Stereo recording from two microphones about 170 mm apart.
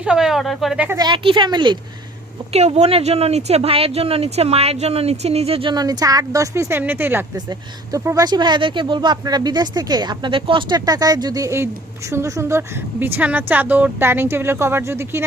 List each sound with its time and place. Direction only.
0.0 s speech: 5° right (ahead or behind)
0.9 s speech: 25° right (ahead or behind)
2.5 s speech: 40° right (ahead or behind); by 15.2 s 15° right (ahead or behind)